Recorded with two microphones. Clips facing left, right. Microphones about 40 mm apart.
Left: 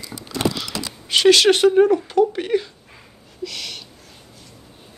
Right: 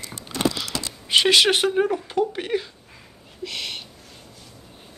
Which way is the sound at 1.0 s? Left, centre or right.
Centre.